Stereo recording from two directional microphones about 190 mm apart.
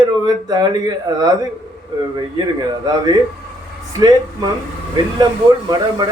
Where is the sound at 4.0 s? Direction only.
20° right (ahead or behind).